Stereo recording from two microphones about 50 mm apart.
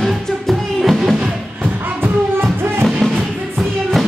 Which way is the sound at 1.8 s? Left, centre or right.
Right.